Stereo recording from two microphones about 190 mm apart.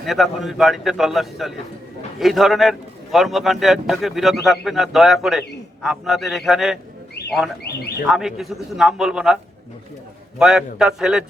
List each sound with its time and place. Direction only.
0.0 s a man's voice: centre (ahead or behind)
7.6 s speech: 60° left (ahead or behind)
8.0 s a man's voice: centre (ahead or behind)